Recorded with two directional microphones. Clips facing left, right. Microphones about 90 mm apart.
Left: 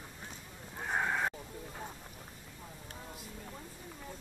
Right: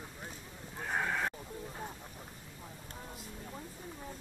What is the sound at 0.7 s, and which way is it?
Neigh, 10° left (ahead or behind).